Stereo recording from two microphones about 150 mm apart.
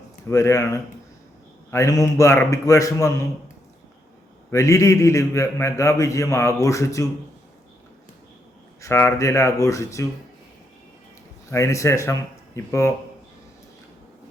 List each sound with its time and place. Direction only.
0.3 s a man's voice: 20° left (ahead or behind)
4.5 s a man's voice: 20° left (ahead or behind)
8.8 s a man's voice: 15° left (ahead or behind)
11.5 s a man's voice: 20° left (ahead or behind)